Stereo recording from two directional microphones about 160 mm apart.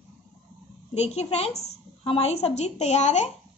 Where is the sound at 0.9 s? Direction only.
40° left (ahead or behind).